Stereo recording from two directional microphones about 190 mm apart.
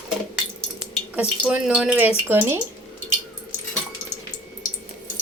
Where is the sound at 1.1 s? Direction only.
5° right (ahead or behind).